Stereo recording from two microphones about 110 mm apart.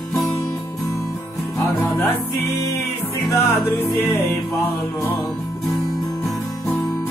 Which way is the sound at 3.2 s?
25° left (ahead or behind).